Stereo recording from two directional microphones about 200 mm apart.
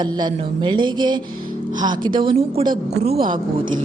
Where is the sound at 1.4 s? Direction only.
45° right (ahead or behind).